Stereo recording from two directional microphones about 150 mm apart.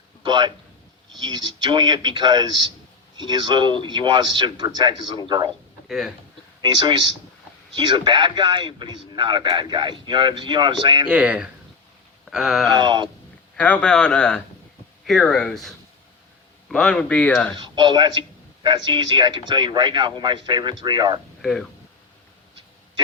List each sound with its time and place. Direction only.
0.2 s a man's voice: 30° right (ahead or behind)
6.6 s a man's voice: 30° right (ahead or behind)
11.1 s speech: 10° right (ahead or behind)
12.2 s wail: centre (ahead or behind)
12.7 s a man's voice: 30° right (ahead or behind)
13.6 s speech: 5° left (ahead or behind)
17.6 s a man's voice: 35° right (ahead or behind)
21.4 s speech: centre (ahead or behind)